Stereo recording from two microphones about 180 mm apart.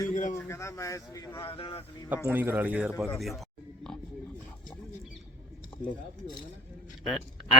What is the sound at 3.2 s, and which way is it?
Oink, centre (ahead or behind).